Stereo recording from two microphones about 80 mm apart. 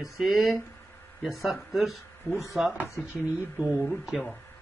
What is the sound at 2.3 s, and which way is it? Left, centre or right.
Speech, left.